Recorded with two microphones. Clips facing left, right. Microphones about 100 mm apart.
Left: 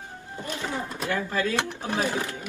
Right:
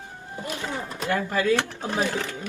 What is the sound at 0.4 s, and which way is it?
Speech, 20° right (ahead or behind).